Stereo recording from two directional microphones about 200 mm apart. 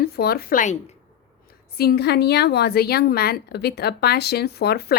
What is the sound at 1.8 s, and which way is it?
A woman's voice, 55° left (ahead or behind).